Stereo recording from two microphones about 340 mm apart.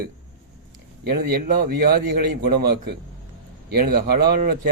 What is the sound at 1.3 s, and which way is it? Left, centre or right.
Speech, right.